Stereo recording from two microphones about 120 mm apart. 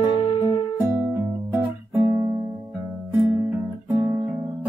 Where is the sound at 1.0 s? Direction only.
20° right (ahead or behind).